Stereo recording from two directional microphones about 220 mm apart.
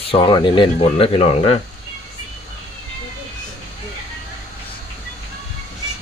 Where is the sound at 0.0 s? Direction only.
25° left (ahead or behind).